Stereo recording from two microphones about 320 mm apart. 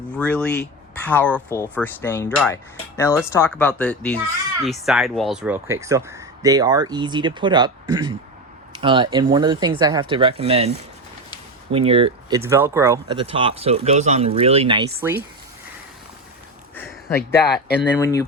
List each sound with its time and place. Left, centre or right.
0.2 s speech: centre
17.2 s speech: left
17.9 s speech: centre